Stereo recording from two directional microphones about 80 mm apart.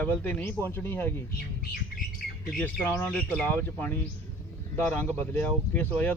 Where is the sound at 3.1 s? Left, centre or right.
Centre.